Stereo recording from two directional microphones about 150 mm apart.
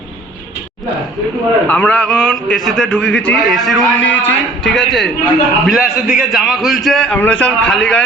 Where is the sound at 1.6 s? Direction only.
10° left (ahead or behind).